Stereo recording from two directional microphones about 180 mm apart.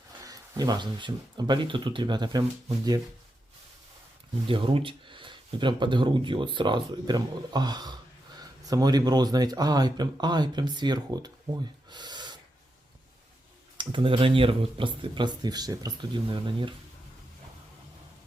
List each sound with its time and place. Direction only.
0.3 s speech: 20° right (ahead or behind)
4.4 s speech: 30° right (ahead or behind)
11.9 s gasp: 25° right (ahead or behind)
13.7 s speech: 30° right (ahead or behind)